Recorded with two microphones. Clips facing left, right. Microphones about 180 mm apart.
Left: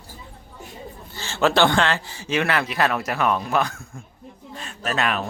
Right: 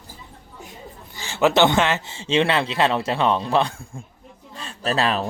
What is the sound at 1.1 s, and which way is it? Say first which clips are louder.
A man's voice: right 2 dB; 15° right (ahead or behind).